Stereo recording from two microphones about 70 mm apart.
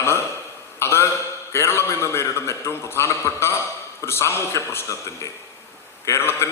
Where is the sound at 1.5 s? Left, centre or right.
Left.